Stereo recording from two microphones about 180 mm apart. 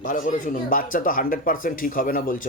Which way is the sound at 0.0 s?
45° left (ahead or behind).